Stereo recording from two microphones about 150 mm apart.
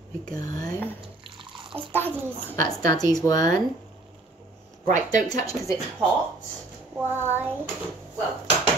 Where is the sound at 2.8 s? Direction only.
25° left (ahead or behind).